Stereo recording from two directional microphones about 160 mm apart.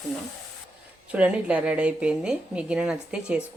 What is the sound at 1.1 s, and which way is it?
Speech, 10° right (ahead or behind).